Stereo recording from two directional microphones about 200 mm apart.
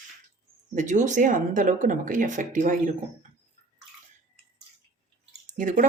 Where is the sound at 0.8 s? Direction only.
35° right (ahead or behind).